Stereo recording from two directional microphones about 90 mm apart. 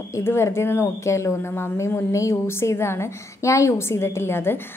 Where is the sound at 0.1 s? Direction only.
30° left (ahead or behind).